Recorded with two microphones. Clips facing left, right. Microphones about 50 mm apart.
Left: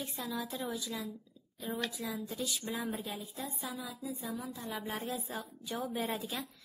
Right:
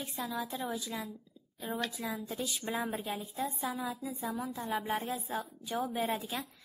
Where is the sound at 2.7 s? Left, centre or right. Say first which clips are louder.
Right 3 dB; right.